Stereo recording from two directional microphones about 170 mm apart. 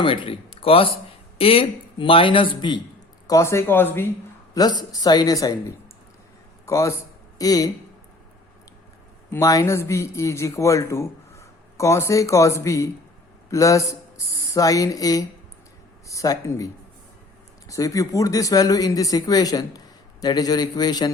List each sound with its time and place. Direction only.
0.0 s a man's voice: 30° left (ahead or behind); by 4.1 s 15° left (ahead or behind)
4.5 s speech: 25° left (ahead or behind)
9.3 s a man's voice: 20° left (ahead or behind)
17.7 s speech: 20° left (ahead or behind)